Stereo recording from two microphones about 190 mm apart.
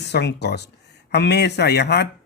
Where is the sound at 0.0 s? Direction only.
65° left (ahead or behind).